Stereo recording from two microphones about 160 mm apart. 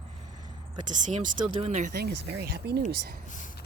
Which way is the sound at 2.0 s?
80° right.